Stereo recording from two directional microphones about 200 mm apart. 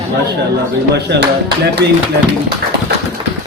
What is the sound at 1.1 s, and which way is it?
Speech, 60° right (ahead or behind).